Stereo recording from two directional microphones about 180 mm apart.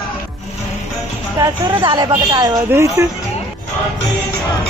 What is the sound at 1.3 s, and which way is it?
A woman's voice, 25° right (ahead or behind).